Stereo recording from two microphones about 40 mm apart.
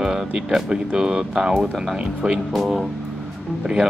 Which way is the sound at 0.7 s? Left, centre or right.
Centre.